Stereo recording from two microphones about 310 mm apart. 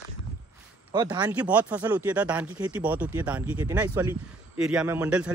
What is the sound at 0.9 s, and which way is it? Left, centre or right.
Speech, centre.